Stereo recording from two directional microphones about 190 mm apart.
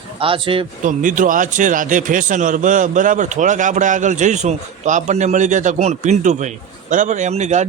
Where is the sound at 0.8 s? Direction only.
45° right (ahead or behind).